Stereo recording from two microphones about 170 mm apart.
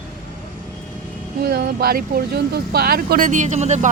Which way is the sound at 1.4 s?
65° right (ahead or behind).